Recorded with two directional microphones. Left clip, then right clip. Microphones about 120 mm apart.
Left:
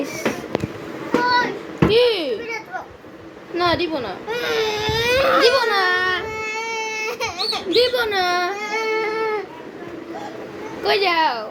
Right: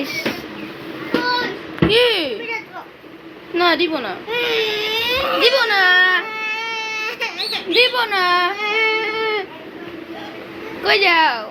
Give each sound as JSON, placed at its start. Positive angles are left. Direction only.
{"t": 0.0, "sound": "a sound", "side_deg": 25}
{"t": 1.9, "sound": "a sound", "side_deg": 5}
{"t": 3.5, "sound": "a woman's voice", "side_deg": 5}
{"t": 4.3, "sound": "speech", "side_deg": 15}
{"t": 5.0, "sound": "baby cry", "side_deg": 55}
{"t": 5.4, "sound": "baby cry", "side_deg": 15}
{"t": 7.7, "sound": "speech", "side_deg": 0}
{"t": 9.0, "sound": "baby cry", "side_deg": 10}
{"t": 10.8, "sound": "speech", "side_deg": 5}